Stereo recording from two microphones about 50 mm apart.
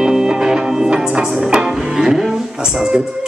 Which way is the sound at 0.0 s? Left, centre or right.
Centre.